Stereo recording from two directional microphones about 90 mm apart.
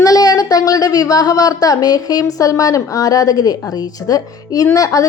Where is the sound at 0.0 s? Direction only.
45° left (ahead or behind).